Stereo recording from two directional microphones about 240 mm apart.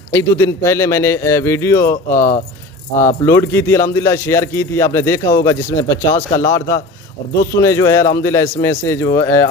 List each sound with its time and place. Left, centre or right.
0.1 s speech: centre
3.3 s speech: centre
6.1 s speech: left
7.5 s speech: centre